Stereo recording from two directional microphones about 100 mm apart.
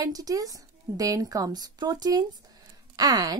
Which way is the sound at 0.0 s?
35° right (ahead or behind).